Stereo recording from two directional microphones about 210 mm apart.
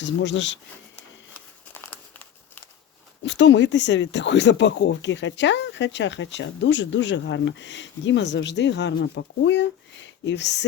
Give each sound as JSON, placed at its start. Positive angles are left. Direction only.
{"t": 0.0, "sound": "speech", "side_deg": 60}
{"t": 3.2, "sound": "speech", "side_deg": 60}